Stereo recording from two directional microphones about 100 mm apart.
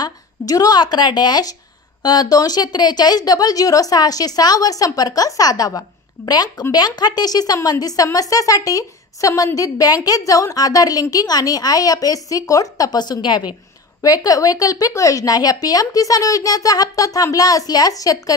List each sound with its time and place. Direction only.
0.0 s a woman's voice: 40° left (ahead or behind)
14.0 s a woman's voice: 35° left (ahead or behind)